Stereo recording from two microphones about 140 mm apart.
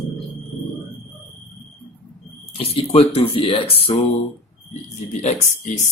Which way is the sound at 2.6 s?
45° left (ahead or behind).